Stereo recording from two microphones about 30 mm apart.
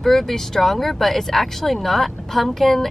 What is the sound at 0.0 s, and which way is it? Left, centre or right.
Speech, centre.